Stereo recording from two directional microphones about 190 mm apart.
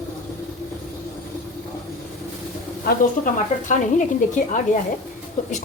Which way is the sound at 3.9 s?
40° left (ahead or behind).